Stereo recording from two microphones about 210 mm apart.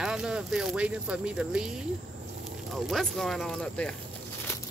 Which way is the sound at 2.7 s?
Centre (ahead or behind).